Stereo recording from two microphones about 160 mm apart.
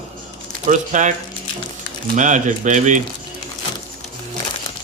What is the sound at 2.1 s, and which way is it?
Speech, 50° right (ahead or behind).